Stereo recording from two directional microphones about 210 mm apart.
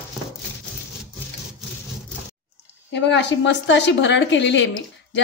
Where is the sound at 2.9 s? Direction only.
55° left (ahead or behind).